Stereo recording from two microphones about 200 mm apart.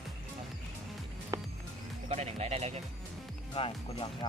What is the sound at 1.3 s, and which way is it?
Music, 15° right (ahead or behind).